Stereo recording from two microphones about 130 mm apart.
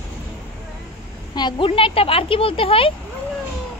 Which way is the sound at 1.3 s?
40° left (ahead or behind).